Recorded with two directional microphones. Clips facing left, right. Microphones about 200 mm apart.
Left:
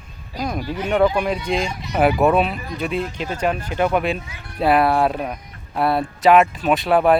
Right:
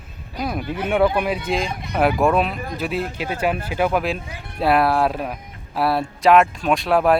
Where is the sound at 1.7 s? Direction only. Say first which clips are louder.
Right 1 dB; 55° right (ahead or behind).